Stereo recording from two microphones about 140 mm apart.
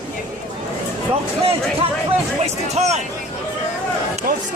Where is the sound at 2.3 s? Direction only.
50° right (ahead or behind).